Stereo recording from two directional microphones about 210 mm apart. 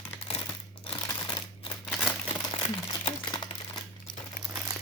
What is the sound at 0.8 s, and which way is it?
Typewriter, 25° left (ahead or behind).